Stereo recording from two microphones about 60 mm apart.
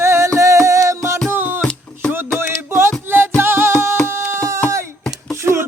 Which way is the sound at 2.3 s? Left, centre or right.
Right.